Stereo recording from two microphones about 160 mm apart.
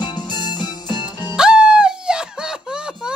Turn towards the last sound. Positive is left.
turn(degrees=-5)  # may be behind; listen again after turning